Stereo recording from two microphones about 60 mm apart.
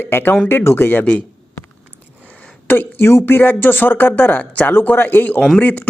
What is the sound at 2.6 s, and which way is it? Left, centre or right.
Speech, left.